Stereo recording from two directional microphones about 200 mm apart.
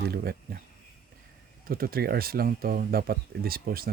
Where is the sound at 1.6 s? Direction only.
45° right (ahead or behind).